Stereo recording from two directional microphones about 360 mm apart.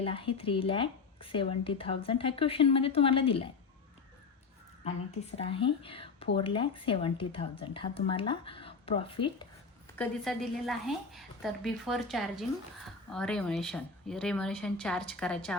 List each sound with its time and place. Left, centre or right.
0.0 s a woman's voice: centre
4.8 s a woman's voice: centre
9.9 s a woman's voice: centre